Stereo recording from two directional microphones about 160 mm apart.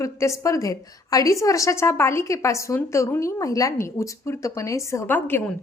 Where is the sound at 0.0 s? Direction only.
20° left (ahead or behind).